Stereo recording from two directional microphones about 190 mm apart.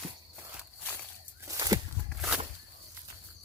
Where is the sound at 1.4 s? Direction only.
15° right (ahead or behind).